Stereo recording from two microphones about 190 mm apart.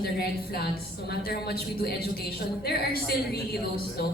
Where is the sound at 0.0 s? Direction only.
55° left (ahead or behind).